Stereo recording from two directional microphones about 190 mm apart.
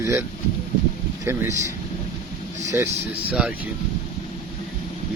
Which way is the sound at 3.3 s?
5° right (ahead or behind).